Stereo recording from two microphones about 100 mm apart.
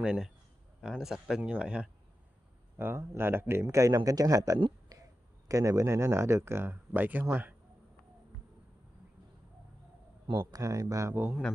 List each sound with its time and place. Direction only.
0.0 s speech: 5° right (ahead or behind)
2.8 s speech: 25° right (ahead or behind)
10.3 s speech: 30° right (ahead or behind)
11.1 s speech: 15° right (ahead or behind)